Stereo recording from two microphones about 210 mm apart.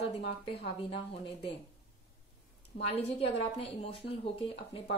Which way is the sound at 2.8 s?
30° left (ahead or behind).